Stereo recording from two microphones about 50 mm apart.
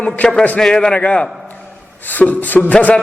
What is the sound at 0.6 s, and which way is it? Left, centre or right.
Speech, centre.